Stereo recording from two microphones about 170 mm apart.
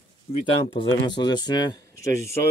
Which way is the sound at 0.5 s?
30° left (ahead or behind).